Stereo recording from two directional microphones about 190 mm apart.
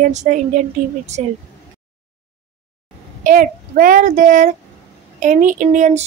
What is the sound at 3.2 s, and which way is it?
A child's voice, 45° right (ahead or behind).